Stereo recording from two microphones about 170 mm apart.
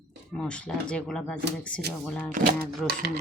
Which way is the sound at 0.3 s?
5° left (ahead or behind).